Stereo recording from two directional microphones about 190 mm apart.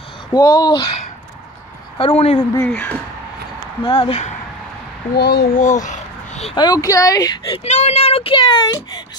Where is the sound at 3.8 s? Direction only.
30° left (ahead or behind).